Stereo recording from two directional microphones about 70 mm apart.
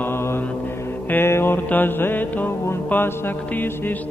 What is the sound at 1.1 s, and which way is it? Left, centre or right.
Music, left.